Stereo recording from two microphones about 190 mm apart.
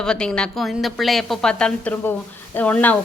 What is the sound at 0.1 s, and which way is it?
A woman's voice, centre (ahead or behind).